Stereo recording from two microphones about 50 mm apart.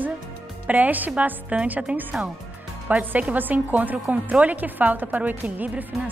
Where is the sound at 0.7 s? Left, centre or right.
Right.